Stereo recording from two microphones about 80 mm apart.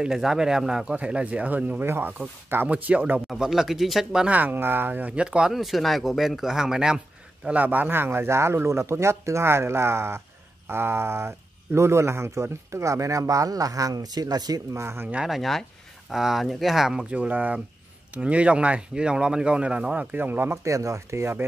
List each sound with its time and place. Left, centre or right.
0.0 s speech: centre
3.3 s speech: centre
4.3 s speech: right
7.4 s speech: right
14.7 s speech: right
15.2 s speech: centre; by 20.5 s right
20.6 s speech: right